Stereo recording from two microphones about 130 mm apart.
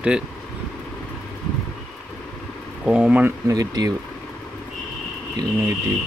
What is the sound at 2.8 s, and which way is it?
Speech, 10° right (ahead or behind).